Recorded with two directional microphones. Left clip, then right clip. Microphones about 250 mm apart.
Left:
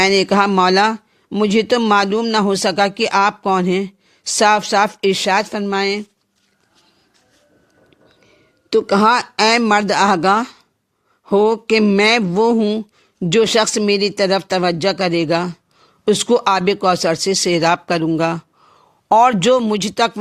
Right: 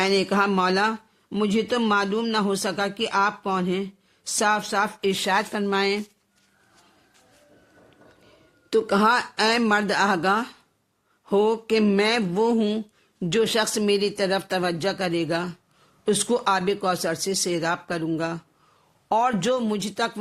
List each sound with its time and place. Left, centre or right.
0.0 s speech: left
8.7 s speech: left